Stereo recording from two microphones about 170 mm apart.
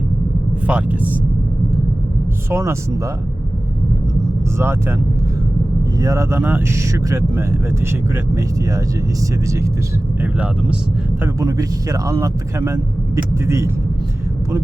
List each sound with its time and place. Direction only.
0.7 s speech: 10° right (ahead or behind)
2.5 s speech: 15° right (ahead or behind)
4.5 s speech: 15° right (ahead or behind)
6.0 s speech: 20° right (ahead or behind)
10.2 s speech: 10° right (ahead or behind)
11.2 s speech: 20° right (ahead or behind)